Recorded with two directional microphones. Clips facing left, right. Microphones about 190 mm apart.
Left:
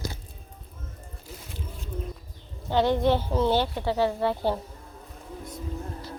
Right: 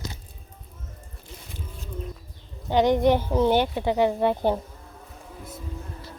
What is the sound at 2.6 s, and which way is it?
A woman's voice, 15° right (ahead or behind).